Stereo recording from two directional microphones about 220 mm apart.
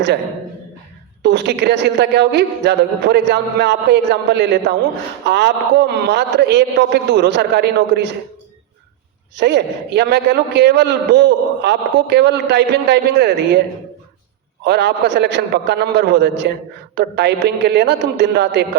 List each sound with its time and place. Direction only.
1.2 s a man's voice: 50° right (ahead or behind)
9.4 s a man's voice: 50° right (ahead or behind)
14.6 s a man's voice: 50° right (ahead or behind)